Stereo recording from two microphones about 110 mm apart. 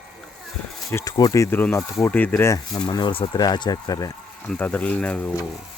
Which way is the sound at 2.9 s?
50° left (ahead or behind).